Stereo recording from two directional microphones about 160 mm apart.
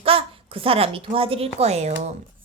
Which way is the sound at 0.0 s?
35° right (ahead or behind).